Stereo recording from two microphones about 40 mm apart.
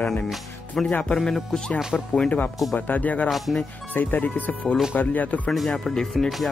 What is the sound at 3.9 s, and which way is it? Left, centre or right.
Speech, left.